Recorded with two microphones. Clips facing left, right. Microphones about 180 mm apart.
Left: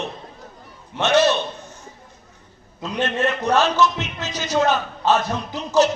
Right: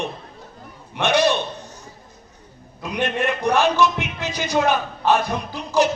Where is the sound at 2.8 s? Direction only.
15° right (ahead or behind).